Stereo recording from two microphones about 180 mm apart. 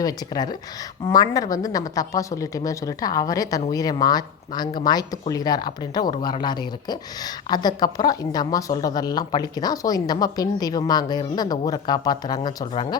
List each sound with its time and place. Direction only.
0.0 s speech: 20° left (ahead or behind)